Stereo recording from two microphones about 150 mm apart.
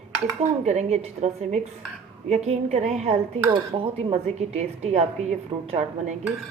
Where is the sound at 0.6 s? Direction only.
50° right (ahead or behind).